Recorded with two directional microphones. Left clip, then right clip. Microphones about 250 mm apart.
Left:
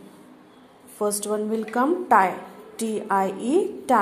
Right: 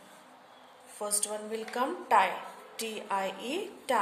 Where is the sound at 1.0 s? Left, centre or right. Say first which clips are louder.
Left 10 dB; centre.